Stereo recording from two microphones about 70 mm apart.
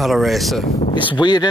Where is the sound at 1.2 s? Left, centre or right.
Left.